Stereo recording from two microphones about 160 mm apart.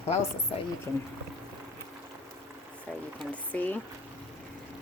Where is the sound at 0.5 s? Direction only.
35° left (ahead or behind).